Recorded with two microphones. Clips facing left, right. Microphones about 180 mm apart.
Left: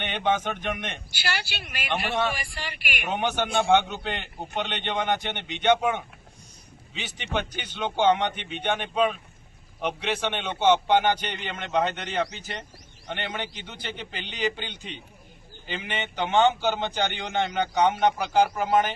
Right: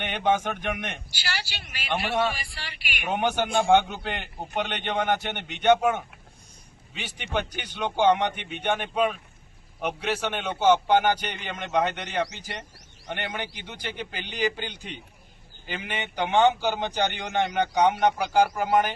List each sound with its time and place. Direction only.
0.0 s a man's voice: 10° right (ahead or behind)
1.1 s speech: 55° left (ahead or behind)
3.0 s a man's voice: 10° right (ahead or behind)